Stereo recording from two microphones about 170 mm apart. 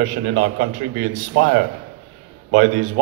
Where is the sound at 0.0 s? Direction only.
60° right (ahead or behind).